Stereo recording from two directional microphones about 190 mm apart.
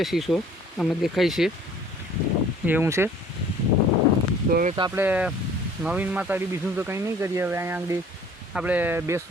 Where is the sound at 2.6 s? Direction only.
10° right (ahead or behind).